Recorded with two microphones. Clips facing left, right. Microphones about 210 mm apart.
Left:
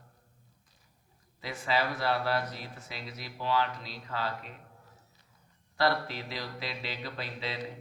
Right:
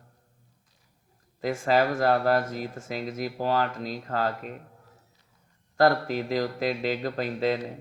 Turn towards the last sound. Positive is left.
turn(degrees=-45)  # may be behind; listen again after turning